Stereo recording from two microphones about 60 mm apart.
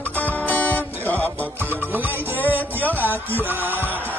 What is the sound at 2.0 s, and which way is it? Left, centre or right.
Music, right.